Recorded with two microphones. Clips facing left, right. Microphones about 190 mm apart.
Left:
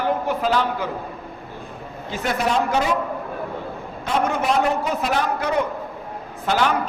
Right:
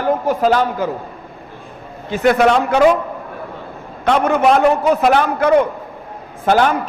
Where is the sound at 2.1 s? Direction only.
70° right (ahead or behind).